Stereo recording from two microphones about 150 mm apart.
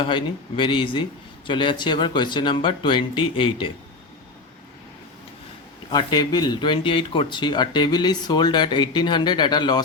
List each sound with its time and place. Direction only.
0.0 s speech: 30° left (ahead or behind)
5.9 s speech: 30° left (ahead or behind)